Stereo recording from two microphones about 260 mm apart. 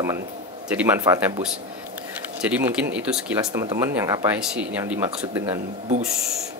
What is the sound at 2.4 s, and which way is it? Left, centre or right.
Speech, centre.